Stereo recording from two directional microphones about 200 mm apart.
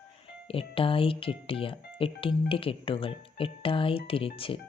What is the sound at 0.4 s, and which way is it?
Speech, 25° left (ahead or behind).